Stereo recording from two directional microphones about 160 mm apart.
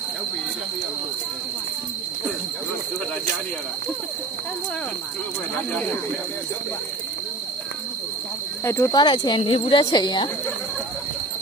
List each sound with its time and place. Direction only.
8.6 s speech: 20° left (ahead or behind)